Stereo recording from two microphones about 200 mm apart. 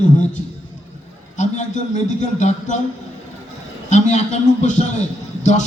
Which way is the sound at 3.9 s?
35° left (ahead or behind).